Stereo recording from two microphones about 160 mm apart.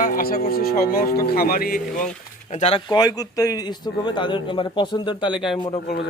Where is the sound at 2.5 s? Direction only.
40° left (ahead or behind).